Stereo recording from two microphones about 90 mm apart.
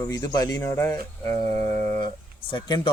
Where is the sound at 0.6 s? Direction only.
30° left (ahead or behind).